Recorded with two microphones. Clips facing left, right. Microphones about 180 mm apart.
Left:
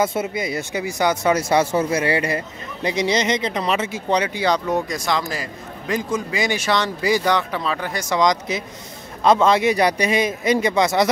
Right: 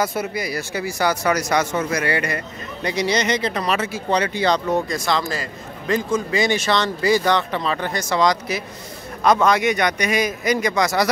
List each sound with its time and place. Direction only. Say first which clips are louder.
0.0 s a man's voice: left 2 dB; 25° left (ahead or behind)